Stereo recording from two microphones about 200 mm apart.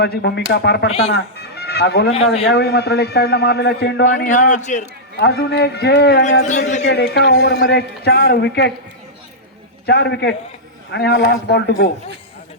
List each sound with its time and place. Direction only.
0.0 s a man's voice: 55° left (ahead or behind)
0.9 s speech: 30° left (ahead or behind)
1.4 s a man's voice: 55° left (ahead or behind)
4.0 s a man's voice: 40° left (ahead or behind)
5.1 s a man's voice: 55° left (ahead or behind)
6.4 s a man's voice: 35° left (ahead or behind)
6.8 s a man's voice: 55° left (ahead or behind)
9.8 s a man's voice: 55° left (ahead or behind)